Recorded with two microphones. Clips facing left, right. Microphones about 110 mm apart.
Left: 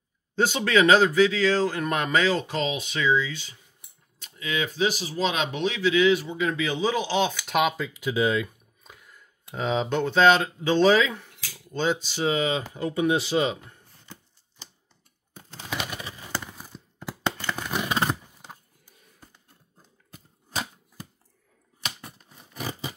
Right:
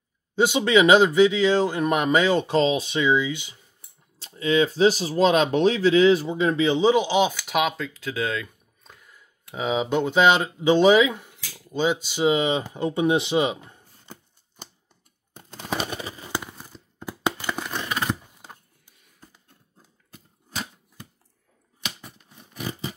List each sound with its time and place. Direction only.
0.4 s speech: 15° right (ahead or behind); by 3.0 s 30° right (ahead or behind)
3.0 s speech: 20° right (ahead or behind)
4.2 s speech: 30° right (ahead or behind); by 7.3 s 15° right (ahead or behind)
7.4 s speech: centre (ahead or behind)
8.9 s speech: centre (ahead or behind); by 14.1 s 15° right (ahead or behind)
15.7 s a sound: 35° right (ahead or behind)
16.4 s a sound: 5° left (ahead or behind)
17.2 s a sound: 10° right (ahead or behind)
17.8 s scissors: 25° left (ahead or behind)